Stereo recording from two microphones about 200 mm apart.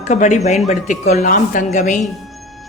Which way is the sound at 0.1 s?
35° left (ahead or behind).